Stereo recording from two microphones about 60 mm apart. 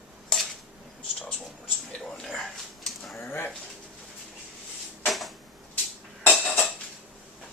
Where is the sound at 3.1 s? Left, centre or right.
Left.